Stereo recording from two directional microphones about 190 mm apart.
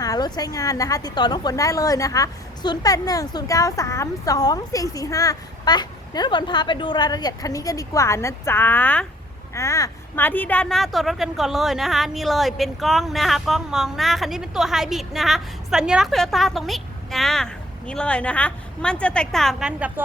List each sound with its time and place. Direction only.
0.0 s a woman's voice: 20° left (ahead or behind); by 19.9 s 5° right (ahead or behind)